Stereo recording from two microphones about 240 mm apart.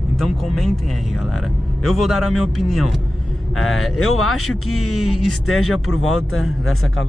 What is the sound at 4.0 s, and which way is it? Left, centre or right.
Speech, left.